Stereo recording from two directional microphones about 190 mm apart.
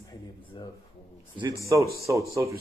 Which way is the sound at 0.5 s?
25° left (ahead or behind).